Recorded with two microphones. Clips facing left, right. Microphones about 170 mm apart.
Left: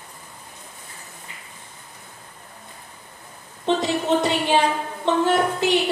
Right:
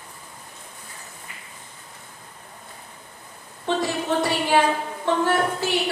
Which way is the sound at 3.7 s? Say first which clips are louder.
Left 3 dB; 20° left (ahead or behind).